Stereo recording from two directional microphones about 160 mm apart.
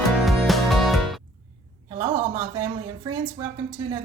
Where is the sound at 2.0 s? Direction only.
30° right (ahead or behind).